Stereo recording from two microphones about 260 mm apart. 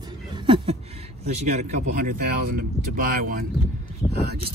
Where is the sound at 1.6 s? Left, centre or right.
Right.